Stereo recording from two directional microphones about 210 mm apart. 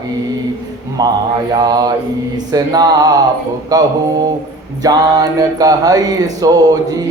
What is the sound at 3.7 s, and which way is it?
A man's voice, 20° right (ahead or behind).